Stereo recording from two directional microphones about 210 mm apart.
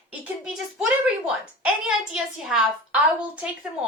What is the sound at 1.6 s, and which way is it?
Speech, centre (ahead or behind).